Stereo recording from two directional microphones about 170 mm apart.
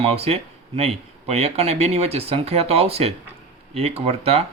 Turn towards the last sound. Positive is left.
turn(degrees=-35)  # may be behind; listen again after turning